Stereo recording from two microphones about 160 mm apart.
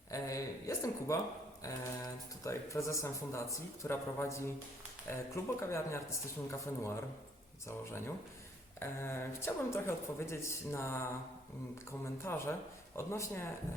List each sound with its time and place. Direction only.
0.1 s speech: 20° left (ahead or behind)